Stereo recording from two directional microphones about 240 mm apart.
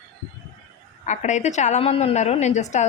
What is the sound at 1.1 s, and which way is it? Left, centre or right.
A woman's voice, left.